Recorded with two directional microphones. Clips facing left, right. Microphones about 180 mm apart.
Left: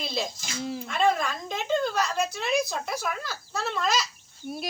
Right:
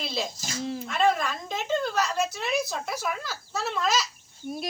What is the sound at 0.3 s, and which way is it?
Speech, 40° right (ahead or behind).